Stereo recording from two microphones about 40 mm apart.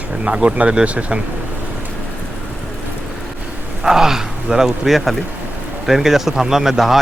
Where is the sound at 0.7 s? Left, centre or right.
Right.